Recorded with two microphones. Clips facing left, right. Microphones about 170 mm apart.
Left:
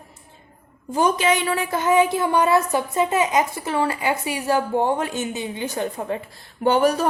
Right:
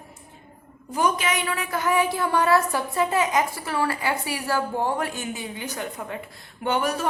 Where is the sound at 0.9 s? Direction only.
30° left (ahead or behind).